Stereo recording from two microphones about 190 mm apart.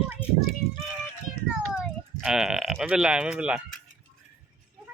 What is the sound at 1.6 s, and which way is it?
Sheep, centre (ahead or behind).